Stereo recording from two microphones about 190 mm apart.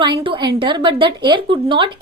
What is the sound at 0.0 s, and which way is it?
A woman's voice, 25° right (ahead or behind).